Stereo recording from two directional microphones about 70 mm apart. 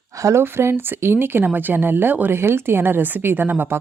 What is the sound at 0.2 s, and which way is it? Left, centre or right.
Speech, right.